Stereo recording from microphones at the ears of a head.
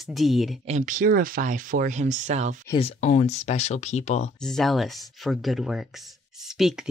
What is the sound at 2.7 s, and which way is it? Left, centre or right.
Speech, left.